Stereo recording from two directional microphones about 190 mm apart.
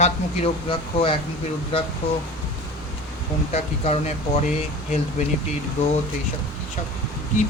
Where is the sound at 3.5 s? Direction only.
35° left (ahead or behind).